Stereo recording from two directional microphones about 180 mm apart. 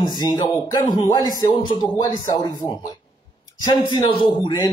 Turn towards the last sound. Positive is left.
turn(degrees=25)  # may be behind; listen again after turning